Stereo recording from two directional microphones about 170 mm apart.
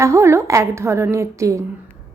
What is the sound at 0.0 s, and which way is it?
A woman's voice, 15° right (ahead or behind).